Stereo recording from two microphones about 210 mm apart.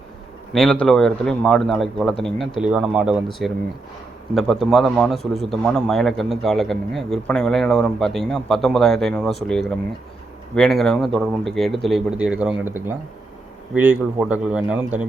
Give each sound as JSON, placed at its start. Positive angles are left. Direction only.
{"t": 0.5, "sound": "a man's voice", "side_deg": 5}